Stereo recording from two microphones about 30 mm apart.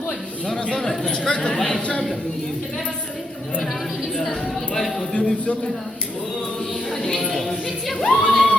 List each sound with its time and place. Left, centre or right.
0.8 s speech: centre
4.2 s speech: centre
5.1 s speech: left
6.9 s speech: left
7.3 s speech: centre
8.3 s a sound: left